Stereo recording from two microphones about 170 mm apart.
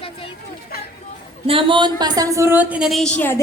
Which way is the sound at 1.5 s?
30° right (ahead or behind).